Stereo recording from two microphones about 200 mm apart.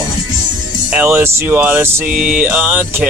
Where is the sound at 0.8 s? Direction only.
10° right (ahead or behind).